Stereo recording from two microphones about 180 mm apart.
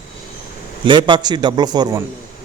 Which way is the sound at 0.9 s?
25° right (ahead or behind).